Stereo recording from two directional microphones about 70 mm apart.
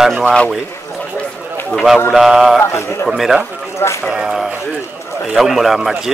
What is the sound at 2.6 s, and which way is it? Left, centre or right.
Speech, left.